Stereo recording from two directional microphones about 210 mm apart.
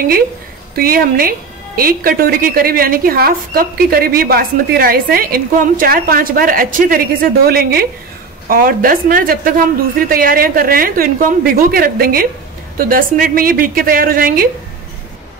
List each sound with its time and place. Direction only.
0.7 s a woman's voice: 45° right (ahead or behind)